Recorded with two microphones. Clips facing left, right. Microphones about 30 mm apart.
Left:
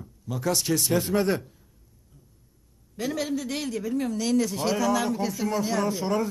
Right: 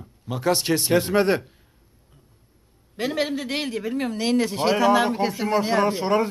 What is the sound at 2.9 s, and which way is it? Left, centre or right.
A man's voice, right.